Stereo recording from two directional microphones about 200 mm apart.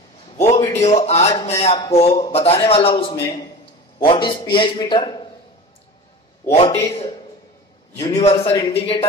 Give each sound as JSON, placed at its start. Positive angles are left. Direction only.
{"t": 0.4, "sound": "a man's voice", "side_deg": 35}
{"t": 6.5, "sound": "speech", "side_deg": 30}
{"t": 8.2, "sound": "a man's voice", "side_deg": 30}